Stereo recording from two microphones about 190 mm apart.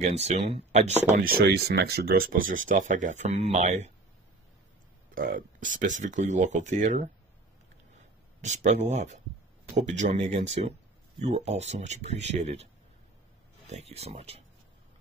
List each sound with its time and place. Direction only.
0.0 s speech: 35° right (ahead or behind)
1.1 s speech: 50° right (ahead or behind)
5.1 s speech: 45° right (ahead or behind)
8.4 s speech: 40° right (ahead or behind)
13.7 s speech: 35° right (ahead or behind)